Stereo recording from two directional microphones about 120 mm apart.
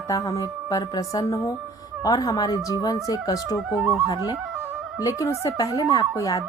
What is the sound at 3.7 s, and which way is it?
Speech, 5° right (ahead or behind).